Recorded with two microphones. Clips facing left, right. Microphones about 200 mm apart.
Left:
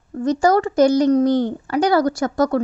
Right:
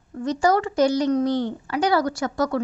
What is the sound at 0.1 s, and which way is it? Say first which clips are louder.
A woman's voice: left 4 dB; 45° left (ahead or behind).